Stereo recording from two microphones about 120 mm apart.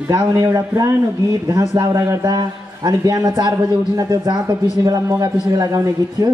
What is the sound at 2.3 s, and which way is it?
A man's voice, 30° right (ahead or behind).